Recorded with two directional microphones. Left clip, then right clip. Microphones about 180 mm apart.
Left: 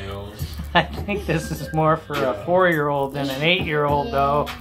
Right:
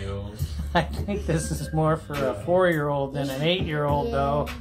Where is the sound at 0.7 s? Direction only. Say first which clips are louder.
Left 5 dB; 25° right (ahead or behind).